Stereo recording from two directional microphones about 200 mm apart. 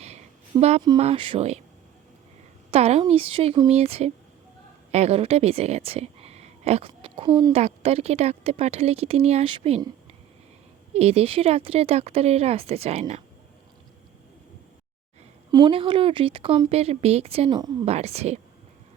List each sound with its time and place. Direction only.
0.5 s a woman's voice: 20° right (ahead or behind)
2.6 s a woman's voice: 30° right (ahead or behind)
10.9 s a woman's voice: 30° right (ahead or behind)
15.5 s speech: 25° right (ahead or behind)
17.8 s a woman's voice: 30° right (ahead or behind)